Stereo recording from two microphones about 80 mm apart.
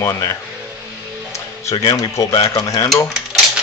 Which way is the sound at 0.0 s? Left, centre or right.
Left.